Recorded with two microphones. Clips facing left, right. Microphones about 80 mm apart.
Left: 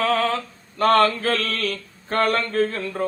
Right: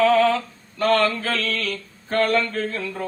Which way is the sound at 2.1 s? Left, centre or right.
Left.